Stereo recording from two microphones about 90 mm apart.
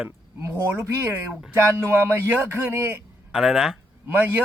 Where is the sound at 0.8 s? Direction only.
30° right (ahead or behind).